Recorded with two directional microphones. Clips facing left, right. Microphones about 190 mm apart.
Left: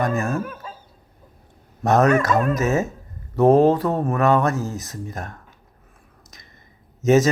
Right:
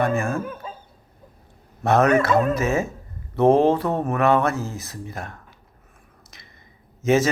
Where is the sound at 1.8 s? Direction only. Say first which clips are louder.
Left 1 dB; 40° left (ahead or behind).